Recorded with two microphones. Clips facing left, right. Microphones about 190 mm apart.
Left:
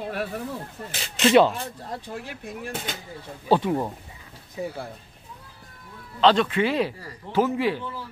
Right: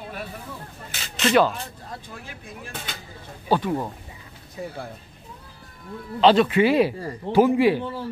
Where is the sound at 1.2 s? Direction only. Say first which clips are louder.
Left 2 dB; 25° left (ahead or behind).